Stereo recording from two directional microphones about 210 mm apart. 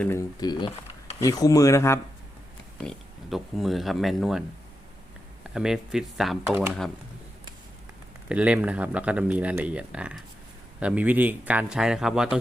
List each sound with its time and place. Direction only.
0.0 s speech: 15° left (ahead or behind)
2.8 s speech: centre (ahead or behind)
8.3 s speech: 5° right (ahead or behind)